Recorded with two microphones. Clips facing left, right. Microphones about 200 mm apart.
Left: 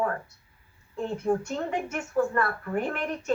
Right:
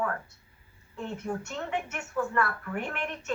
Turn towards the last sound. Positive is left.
turn(degrees=35)  # may be behind; listen again after turning